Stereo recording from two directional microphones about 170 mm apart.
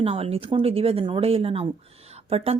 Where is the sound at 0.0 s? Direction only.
35° right (ahead or behind).